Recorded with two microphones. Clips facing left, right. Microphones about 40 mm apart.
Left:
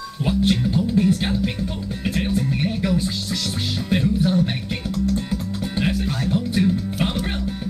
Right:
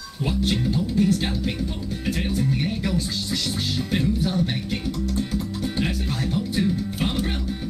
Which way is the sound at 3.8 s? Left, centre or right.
Centre.